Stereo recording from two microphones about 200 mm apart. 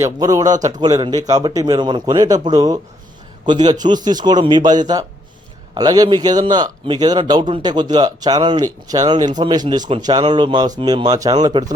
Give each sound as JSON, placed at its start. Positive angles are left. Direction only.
{"t": 0.0, "sound": "speech", "side_deg": -15}